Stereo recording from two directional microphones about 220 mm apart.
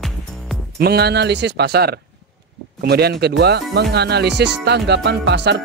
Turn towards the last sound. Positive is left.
turn(degrees=-50)  # may be behind; listen again after turning